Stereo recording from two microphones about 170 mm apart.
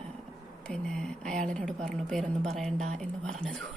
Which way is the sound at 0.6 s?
5° left (ahead or behind).